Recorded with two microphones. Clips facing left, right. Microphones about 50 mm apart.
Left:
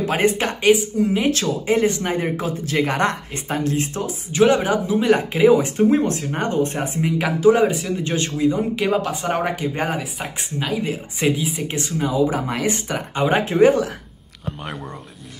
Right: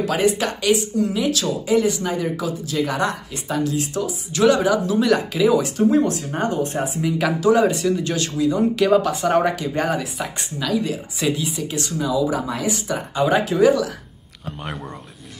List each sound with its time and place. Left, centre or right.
0.0 s speech: left
4.3 s speech: left
7.1 s speech: left
8.5 s speech: centre
9.5 s speech: left
12.1 s speech: left
13.2 s speech: left
14.6 s speech: centre